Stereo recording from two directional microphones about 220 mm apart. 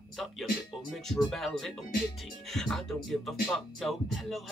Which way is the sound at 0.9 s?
Centre (ahead or behind).